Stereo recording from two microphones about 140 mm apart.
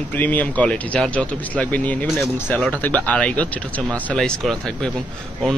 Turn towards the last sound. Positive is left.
turn(degrees=5)  # may be behind; listen again after turning